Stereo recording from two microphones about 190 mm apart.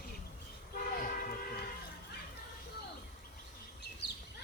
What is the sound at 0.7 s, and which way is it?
Train, 50° left (ahead or behind).